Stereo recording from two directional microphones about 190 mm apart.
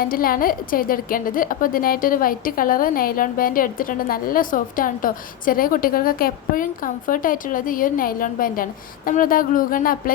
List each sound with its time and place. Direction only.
0.0 s a woman's voice: 50° left (ahead or behind)